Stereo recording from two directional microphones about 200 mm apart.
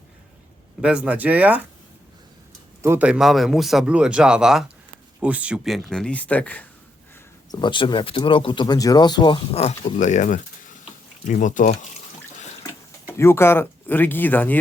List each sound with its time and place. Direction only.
0.8 s speech: 5° right (ahead or behind)
2.8 s speech: 10° right (ahead or behind); by 6.7 s 5° left (ahead or behind)
7.5 s speech: 25° left (ahead or behind)
12.6 s speech: 15° left (ahead or behind)